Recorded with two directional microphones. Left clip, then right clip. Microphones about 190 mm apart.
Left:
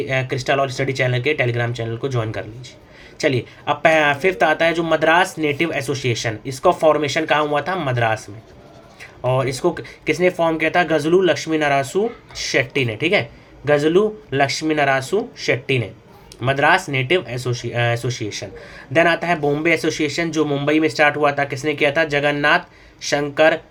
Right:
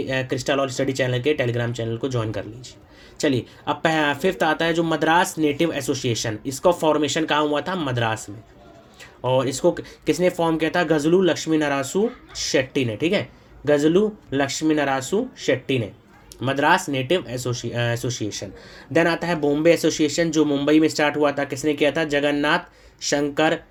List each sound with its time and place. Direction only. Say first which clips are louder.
0.1 s speech: left 3 dB; 35° right (ahead or behind)
9.2 s speech: left 1 dB; 35° right (ahead or behind)
13.7 s speech: left 2 dB; 35° right (ahead or behind)
16.4 s speech: left 3 dB; 35° right (ahead or behind)